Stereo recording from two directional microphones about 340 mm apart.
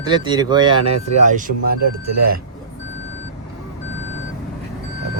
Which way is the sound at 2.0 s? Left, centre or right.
Right.